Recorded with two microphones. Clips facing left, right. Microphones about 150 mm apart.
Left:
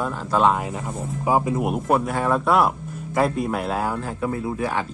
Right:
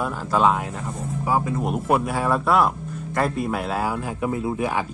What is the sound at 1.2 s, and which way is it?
Speech, 15° left (ahead or behind).